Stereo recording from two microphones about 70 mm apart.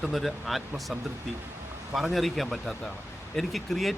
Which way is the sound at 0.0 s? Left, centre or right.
Centre.